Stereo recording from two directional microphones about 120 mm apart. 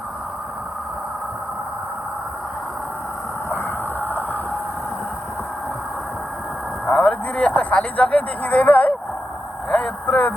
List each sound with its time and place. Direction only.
3.5 s a sound: 15° left (ahead or behind)
6.8 s speech: 5° left (ahead or behind)
9.6 s vehicle: 5° left (ahead or behind)